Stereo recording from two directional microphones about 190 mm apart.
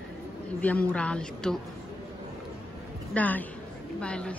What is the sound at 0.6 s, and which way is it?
Speech, 5° left (ahead or behind).